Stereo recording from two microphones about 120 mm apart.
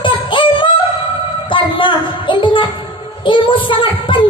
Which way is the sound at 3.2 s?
45° left (ahead or behind).